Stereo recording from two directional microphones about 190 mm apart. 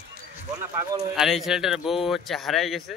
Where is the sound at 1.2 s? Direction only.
Centre (ahead or behind).